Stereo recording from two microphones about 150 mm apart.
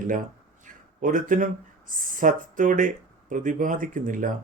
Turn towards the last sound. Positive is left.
turn(degrees=-60)  # may be behind; listen again after turning